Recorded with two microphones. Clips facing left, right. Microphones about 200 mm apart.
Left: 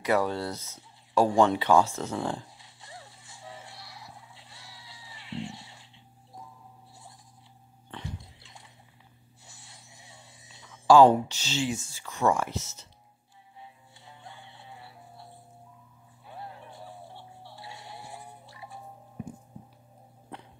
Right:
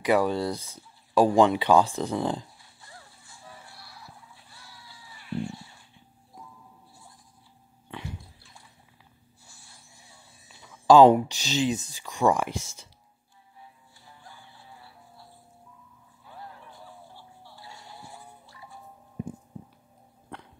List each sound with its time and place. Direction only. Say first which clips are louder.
0.0 s speech: right 3 dB; 15° right (ahead or behind)
2.5 s a sound: left 3 dB; 20° left (ahead or behind)
8.2 s bathtub: left 1 dB; 20° left (ahead or behind)
9.4 s a sound: left 3 dB; 20° left (ahead or behind)
10.9 s speech: right 2 dB; 20° right (ahead or behind)
13.6 s music: left 2 dB; 25° left (ahead or behind)
16.3 s music: left 2 dB; 25° left (ahead or behind)
19.2 s music: right 4 dB; 30° right (ahead or behind)